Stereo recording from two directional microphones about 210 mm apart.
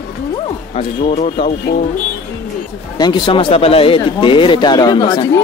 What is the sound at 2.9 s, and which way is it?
Speech, 20° left (ahead or behind).